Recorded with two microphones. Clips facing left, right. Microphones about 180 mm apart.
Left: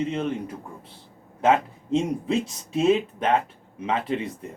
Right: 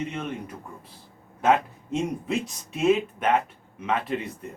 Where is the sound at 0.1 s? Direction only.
30° left (ahead or behind).